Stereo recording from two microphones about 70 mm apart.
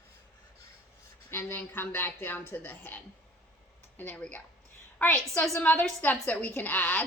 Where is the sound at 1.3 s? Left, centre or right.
Left.